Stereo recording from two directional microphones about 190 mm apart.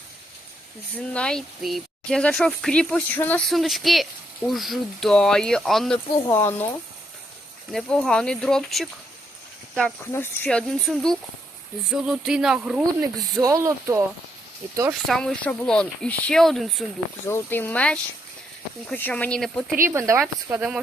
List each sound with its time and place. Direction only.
0.9 s speech: 5° left (ahead or behind)
6.2 s speech: 10° left (ahead or behind)
10.1 s speech: 10° left (ahead or behind)
13.4 s speech: 15° right (ahead or behind)
15.0 s speech: 5° left (ahead or behind)
17.2 s speech: 10° left (ahead or behind)
19.9 s speech: 15° right (ahead or behind)